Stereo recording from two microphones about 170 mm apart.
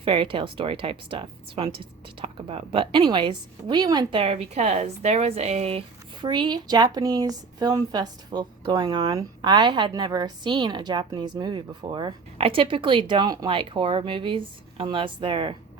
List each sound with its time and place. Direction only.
0.0 s a woman's voice: 30° right (ahead or behind)